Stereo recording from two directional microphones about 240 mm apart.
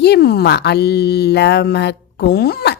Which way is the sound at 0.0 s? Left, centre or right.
Left.